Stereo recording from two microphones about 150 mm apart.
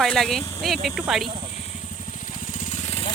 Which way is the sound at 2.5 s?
55° left (ahead or behind).